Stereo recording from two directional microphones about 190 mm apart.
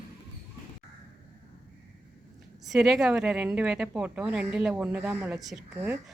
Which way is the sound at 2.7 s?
Centre (ahead or behind).